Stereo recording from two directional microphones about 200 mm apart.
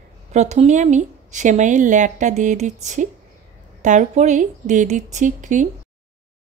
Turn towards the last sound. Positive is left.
turn(degrees=-40)  # may be behind; listen again after turning